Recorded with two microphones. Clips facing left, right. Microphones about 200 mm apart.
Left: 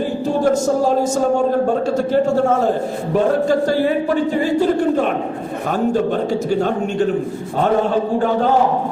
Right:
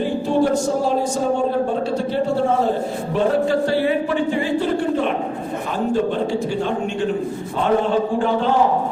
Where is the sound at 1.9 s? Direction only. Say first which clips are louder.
Left 5 dB; 45° left (ahead or behind).